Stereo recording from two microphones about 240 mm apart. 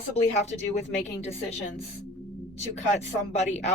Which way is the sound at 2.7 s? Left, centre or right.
Left.